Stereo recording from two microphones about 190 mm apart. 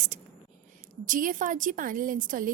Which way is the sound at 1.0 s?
45° right (ahead or behind).